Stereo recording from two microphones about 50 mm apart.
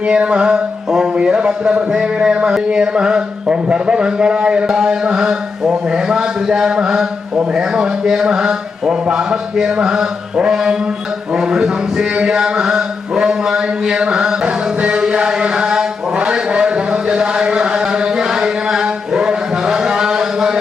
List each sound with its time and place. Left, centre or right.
0.0 s mantra: centre
0.9 s a man's voice: centre
14.4 s music: right